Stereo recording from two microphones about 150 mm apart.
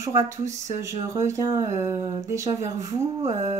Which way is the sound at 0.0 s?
20° right (ahead or behind).